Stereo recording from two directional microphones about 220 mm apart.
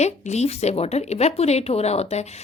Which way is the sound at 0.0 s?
30° left (ahead or behind).